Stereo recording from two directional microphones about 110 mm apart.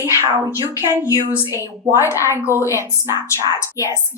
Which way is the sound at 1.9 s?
25° left (ahead or behind).